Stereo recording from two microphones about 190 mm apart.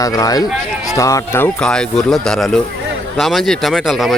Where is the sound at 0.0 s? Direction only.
20° left (ahead or behind).